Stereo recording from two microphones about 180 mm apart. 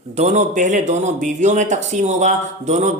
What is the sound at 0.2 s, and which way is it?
Speech, 40° right (ahead or behind).